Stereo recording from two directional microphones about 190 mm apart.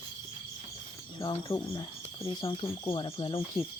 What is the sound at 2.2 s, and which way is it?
Cricket, 30° left (ahead or behind).